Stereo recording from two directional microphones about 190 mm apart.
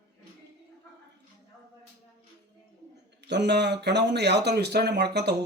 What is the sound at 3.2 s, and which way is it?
A man's voice, 65° right (ahead or behind).